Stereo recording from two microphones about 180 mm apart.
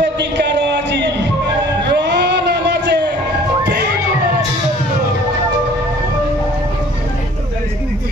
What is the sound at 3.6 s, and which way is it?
Music, 65° right (ahead or behind).